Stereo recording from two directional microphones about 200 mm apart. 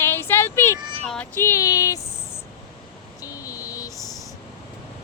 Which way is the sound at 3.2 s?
15° left (ahead or behind).